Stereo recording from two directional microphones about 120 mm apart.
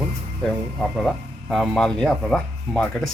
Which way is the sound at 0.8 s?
Centre (ahead or behind).